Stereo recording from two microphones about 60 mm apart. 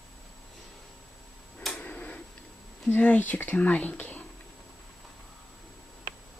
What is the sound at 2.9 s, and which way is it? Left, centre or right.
Speech, left.